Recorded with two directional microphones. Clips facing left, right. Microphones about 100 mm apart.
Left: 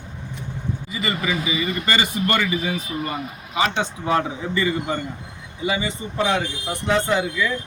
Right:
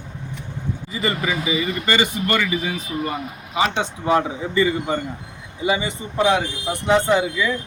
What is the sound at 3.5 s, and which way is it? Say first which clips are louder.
Speech: right 1 dB; 20° right (ahead or behind).